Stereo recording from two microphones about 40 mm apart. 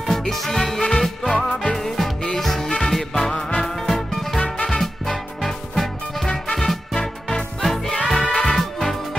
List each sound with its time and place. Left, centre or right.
0.1 s music: centre
1.5 s music: left
1.8 s music: centre